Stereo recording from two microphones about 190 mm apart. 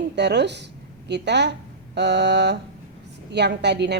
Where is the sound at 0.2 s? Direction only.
65° right (ahead or behind).